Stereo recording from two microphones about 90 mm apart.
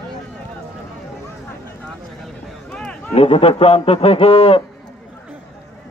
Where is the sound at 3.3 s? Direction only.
90° left.